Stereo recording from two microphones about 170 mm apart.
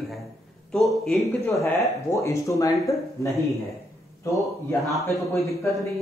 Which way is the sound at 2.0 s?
15° left (ahead or behind).